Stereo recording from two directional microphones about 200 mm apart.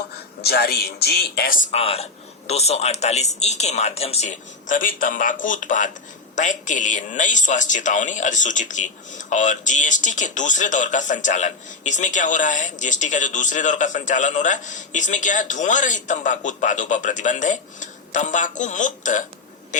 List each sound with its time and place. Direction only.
0.4 s a man's voice: 50° left (ahead or behind)